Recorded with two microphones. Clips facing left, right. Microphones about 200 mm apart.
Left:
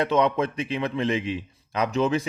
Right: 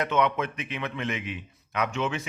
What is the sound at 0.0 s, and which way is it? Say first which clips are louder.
A man's voice: left 4 dB; 30° left (ahead or behind).